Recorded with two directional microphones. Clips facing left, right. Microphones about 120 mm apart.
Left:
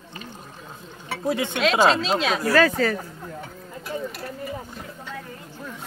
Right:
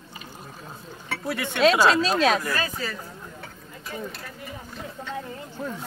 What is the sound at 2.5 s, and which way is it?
Speech, 70° left (ahead or behind).